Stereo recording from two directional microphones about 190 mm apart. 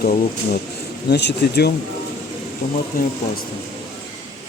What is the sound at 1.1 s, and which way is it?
Speech, 60° left (ahead or behind).